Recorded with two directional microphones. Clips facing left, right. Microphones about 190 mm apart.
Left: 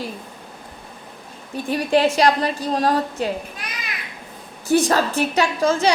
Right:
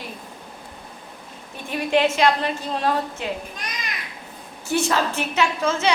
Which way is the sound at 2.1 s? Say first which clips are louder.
Left 2 dB; 35° left (ahead or behind).